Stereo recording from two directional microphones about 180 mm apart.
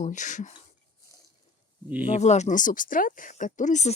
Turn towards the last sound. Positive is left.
turn(degrees=40)  # may be behind; listen again after turning